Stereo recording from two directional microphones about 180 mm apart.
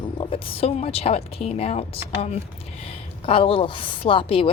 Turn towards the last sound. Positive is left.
turn(degrees=30)  # may be behind; listen again after turning